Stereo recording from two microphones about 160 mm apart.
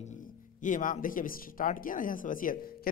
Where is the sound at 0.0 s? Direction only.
50° left (ahead or behind).